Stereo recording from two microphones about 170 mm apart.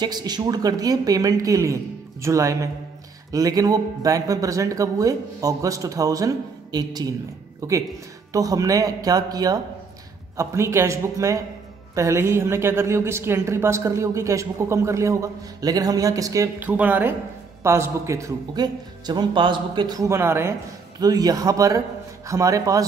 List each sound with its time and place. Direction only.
0.0 s a woman's voice: 25° right (ahead or behind)